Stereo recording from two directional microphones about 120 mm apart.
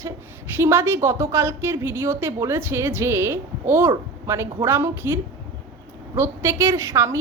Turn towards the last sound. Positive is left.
turn(degrees=-25)  # may be behind; listen again after turning